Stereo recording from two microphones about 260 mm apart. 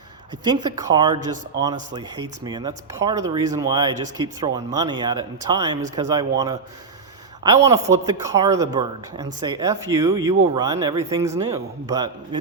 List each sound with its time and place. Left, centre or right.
0.4 s speech: centre